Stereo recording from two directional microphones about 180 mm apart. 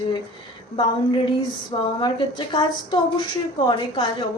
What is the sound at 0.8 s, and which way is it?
A woman's voice, 25° left (ahead or behind).